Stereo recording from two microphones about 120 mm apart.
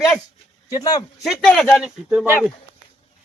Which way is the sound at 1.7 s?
10° right (ahead or behind).